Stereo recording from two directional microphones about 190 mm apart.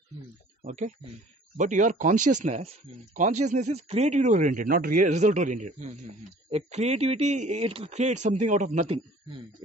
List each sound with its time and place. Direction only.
0.7 s speech: 40° right (ahead or behind)